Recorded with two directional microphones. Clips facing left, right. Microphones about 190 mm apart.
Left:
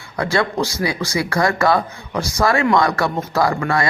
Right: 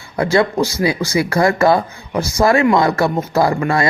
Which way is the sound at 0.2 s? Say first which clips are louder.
Right 4 dB; 25° right (ahead or behind).